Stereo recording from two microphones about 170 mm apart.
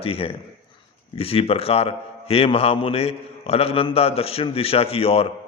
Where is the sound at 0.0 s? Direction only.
35° left (ahead or behind).